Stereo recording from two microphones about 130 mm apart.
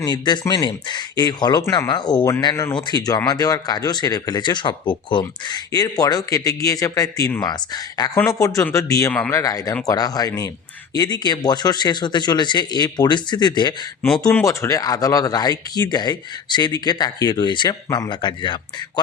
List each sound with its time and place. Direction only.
0.0 s speech: 30° left (ahead or behind)
14.3 s speech: 20° left (ahead or behind); by 18.6 s 35° left (ahead or behind)